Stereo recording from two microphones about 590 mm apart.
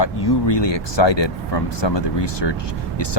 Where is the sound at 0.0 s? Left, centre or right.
Left.